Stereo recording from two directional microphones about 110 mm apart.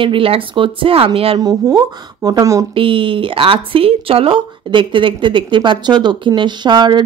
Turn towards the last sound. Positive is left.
turn(degrees=-40)  # may be behind; listen again after turning